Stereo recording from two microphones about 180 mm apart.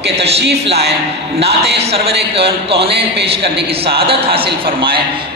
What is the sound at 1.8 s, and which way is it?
A man's voice, 35° right (ahead or behind).